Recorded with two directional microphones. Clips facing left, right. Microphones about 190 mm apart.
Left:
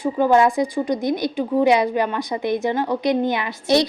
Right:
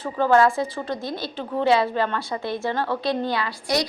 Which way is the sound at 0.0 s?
15° left (ahead or behind).